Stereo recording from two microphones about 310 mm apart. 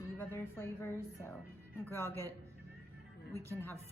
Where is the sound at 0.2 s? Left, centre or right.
Centre.